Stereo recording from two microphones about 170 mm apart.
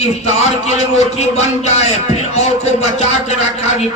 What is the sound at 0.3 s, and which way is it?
A man's voice, 40° left (ahead or behind).